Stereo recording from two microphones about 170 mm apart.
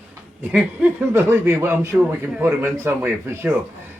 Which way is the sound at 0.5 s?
10° right (ahead or behind).